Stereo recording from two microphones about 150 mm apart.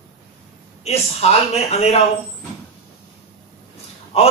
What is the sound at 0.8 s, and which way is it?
Speech, 45° left (ahead or behind).